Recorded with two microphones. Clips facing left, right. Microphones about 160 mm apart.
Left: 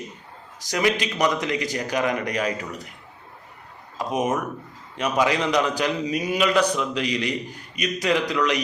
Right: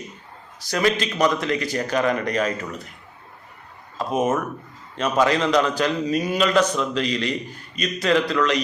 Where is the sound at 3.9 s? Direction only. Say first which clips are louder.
Right 2 dB; 15° left (ahead or behind).